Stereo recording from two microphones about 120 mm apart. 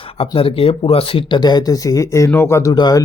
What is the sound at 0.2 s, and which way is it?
Speech, 50° left (ahead or behind).